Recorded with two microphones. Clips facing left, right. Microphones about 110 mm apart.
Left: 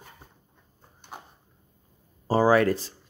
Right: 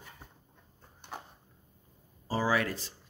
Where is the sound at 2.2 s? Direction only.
45° left (ahead or behind).